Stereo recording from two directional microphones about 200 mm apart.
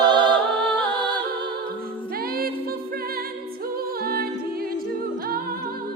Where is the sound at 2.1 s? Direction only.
50° right (ahead or behind).